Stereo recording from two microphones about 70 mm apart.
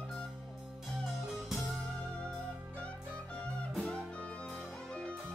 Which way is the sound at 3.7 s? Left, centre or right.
Centre.